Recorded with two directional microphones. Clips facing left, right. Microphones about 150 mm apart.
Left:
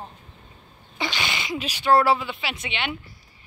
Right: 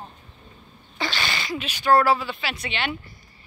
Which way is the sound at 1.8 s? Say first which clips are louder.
Even; 25° left (ahead or behind).